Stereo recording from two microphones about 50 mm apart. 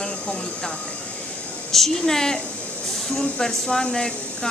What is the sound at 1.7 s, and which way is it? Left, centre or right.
Speech, centre.